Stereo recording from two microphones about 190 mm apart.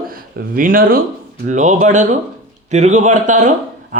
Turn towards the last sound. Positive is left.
turn(degrees=-40)  # may be behind; listen again after turning